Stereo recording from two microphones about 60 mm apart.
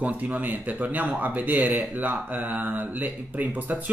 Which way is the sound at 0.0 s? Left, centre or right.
Right.